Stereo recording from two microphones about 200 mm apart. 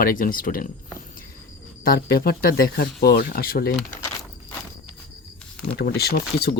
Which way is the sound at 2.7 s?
50° left (ahead or behind).